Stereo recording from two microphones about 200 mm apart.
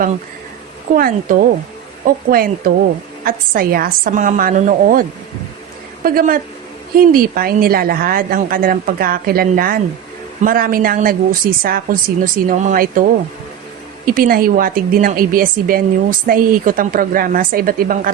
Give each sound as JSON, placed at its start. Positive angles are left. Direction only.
{"t": 0.9, "sound": "a woman's voice", "side_deg": -45}